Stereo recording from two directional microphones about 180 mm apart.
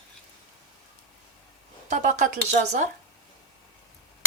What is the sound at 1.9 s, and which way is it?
Speech, 45° right (ahead or behind).